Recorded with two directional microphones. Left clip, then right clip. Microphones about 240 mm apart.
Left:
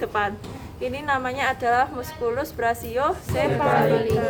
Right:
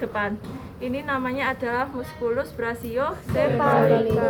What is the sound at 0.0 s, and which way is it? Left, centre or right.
A woman's voice, left.